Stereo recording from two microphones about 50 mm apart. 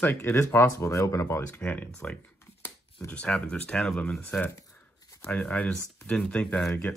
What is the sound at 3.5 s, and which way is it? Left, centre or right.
Speech, left.